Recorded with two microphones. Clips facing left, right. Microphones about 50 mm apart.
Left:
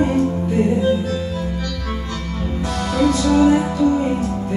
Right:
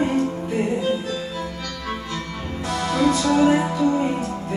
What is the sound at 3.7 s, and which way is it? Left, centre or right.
Music, centre.